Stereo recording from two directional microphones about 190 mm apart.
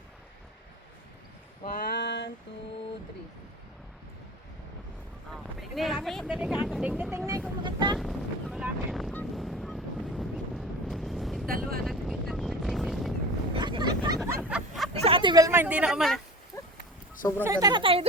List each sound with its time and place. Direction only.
1.6 s a sound: 50° left (ahead or behind)
5.3 s speech: centre (ahead or behind)
7.3 s vehicle: 15° right (ahead or behind)
7.9 s honk: centre (ahead or behind)
11.4 s speech: 50° right (ahead or behind)
11.9 s vehicle: centre (ahead or behind)
13.5 s vehicle: 25° right (ahead or behind)
14.5 s a sound: 5° right (ahead or behind)
15.0 s a woman's voice: 25° right (ahead or behind); by 16.2 s centre (ahead or behind)
16.5 s dog: 15° left (ahead or behind)
17.4 s speech: 15° right (ahead or behind)